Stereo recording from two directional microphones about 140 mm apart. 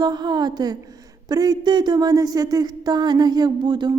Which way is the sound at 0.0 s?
30° right (ahead or behind).